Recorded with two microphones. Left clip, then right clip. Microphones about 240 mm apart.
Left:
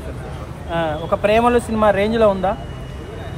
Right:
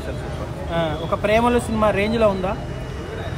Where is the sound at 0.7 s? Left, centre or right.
Left.